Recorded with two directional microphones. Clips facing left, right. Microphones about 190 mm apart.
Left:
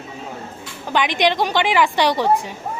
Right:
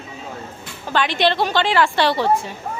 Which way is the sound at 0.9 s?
15° left (ahead or behind).